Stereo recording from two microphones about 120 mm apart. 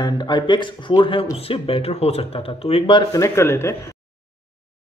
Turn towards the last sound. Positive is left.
turn(degrees=20)  # may be behind; listen again after turning